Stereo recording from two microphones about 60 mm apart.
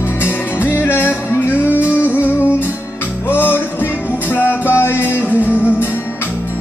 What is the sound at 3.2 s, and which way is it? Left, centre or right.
Music, left.